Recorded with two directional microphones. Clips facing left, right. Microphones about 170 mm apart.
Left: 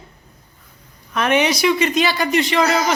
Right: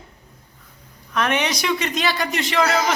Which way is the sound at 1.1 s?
5° left (ahead or behind).